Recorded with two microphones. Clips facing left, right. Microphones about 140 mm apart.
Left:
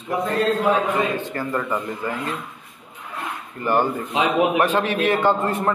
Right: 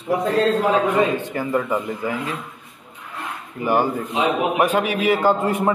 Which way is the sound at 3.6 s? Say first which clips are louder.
Right 1 dB; 10° right (ahead or behind).